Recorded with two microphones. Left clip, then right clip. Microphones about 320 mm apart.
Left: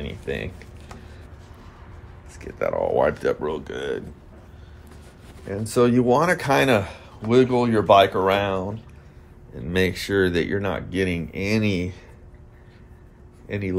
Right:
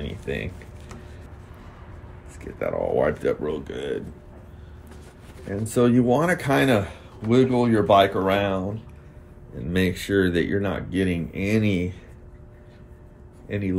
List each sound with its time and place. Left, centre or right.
0.0 s a sound: left
2.4 s speech: left
5.7 s speech: left
13.5 s speech: left